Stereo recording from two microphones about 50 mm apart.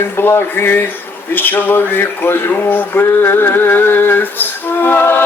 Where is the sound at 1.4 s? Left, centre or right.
Left.